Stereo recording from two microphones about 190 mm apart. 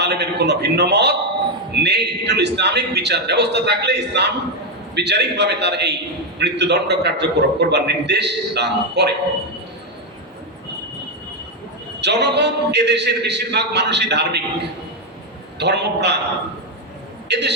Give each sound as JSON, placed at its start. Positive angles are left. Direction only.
{"t": 0.0, "sound": "a man's voice", "side_deg": -60}
{"t": 11.9, "sound": "a man's voice", "side_deg": -65}
{"t": 17.2, "sound": "a man's voice", "side_deg": -60}